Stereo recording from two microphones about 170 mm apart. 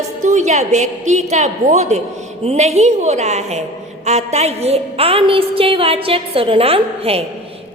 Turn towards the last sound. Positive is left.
turn(degrees=-35)  # may be behind; listen again after turning